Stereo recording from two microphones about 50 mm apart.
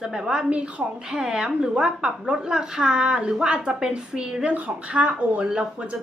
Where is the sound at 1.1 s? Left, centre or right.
Centre.